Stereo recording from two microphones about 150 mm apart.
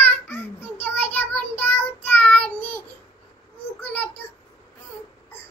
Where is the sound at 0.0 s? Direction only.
15° left (ahead or behind).